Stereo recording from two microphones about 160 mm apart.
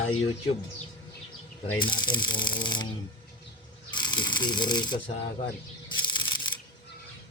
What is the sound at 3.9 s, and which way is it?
Speech, 30° left (ahead or behind).